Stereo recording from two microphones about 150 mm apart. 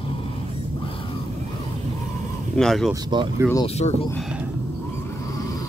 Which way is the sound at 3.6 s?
35° left (ahead or behind).